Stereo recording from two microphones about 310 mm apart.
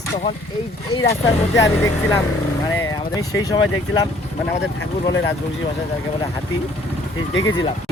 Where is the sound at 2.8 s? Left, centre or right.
Centre.